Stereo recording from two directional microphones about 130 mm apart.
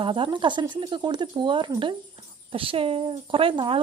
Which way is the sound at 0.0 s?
40° right (ahead or behind).